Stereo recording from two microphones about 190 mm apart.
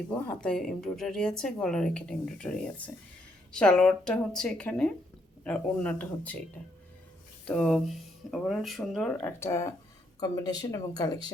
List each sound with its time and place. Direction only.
0.4 s a woman's voice: 5° left (ahead or behind)
7.4 s a woman's voice: 5° left (ahead or behind)
9.4 s speech: 15° left (ahead or behind)